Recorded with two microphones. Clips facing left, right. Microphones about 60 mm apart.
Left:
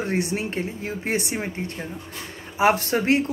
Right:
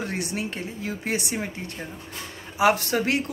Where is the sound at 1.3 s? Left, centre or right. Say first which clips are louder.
Left 2 dB; centre.